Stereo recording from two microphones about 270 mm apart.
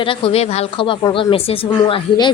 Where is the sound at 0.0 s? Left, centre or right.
Centre.